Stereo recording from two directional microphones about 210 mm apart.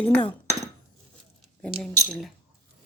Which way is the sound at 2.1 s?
Centre (ahead or behind).